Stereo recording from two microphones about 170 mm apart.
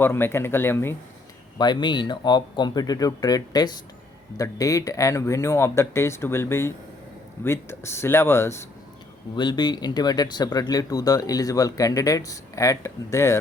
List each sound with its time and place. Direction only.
0.0 s speech: 15° left (ahead or behind)
1.5 s speech: 25° left (ahead or behind)
9.3 s speech: 25° left (ahead or behind)